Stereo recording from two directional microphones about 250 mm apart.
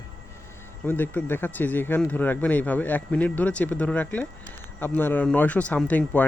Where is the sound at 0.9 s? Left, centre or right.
Centre.